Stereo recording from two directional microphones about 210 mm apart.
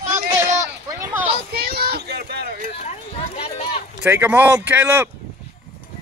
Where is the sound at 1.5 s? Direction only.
50° right (ahead or behind).